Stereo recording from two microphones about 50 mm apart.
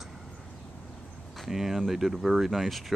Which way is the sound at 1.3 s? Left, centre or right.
Centre.